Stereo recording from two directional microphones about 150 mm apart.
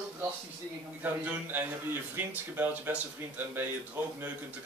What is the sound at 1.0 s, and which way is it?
A man's voice, 10° right (ahead or behind).